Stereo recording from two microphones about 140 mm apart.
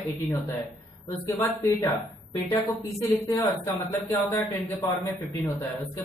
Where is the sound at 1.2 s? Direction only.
20° left (ahead or behind).